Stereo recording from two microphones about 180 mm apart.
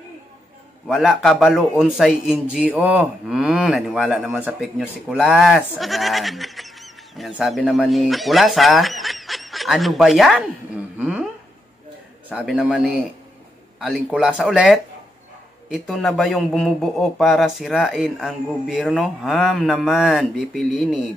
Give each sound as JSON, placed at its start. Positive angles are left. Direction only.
{"t": 0.8, "sound": "speech", "side_deg": 0}
{"t": 11.0, "sound": "a sound", "side_deg": -10}
{"t": 12.3, "sound": "a man's voice", "side_deg": -5}